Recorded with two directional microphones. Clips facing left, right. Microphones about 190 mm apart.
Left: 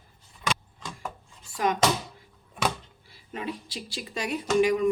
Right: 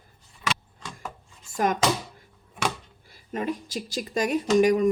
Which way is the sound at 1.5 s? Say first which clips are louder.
Right 7 dB; 45° right (ahead or behind).